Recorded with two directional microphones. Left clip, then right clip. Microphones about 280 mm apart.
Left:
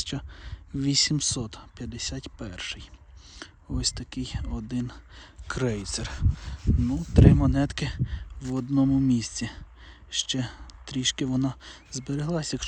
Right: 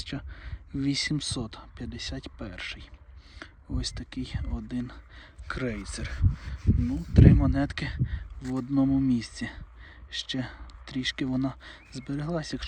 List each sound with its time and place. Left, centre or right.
0.0 s speech: centre